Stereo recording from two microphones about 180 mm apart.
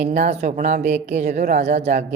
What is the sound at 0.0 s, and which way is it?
Speech, 40° right (ahead or behind).